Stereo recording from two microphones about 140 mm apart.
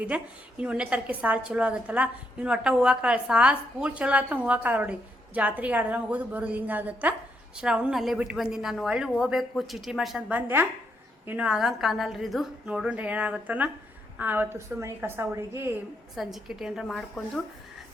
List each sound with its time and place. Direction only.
0.1 s a woman's voice: 10° right (ahead or behind)
16.1 s a woman's voice: centre (ahead or behind)